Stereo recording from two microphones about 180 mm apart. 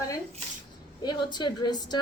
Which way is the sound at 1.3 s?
25° left (ahead or behind).